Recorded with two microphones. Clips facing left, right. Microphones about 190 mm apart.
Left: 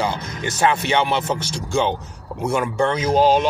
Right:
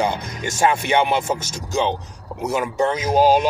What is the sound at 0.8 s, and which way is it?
Music, 10° right (ahead or behind).